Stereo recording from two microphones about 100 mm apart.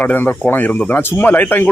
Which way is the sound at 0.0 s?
15° left (ahead or behind).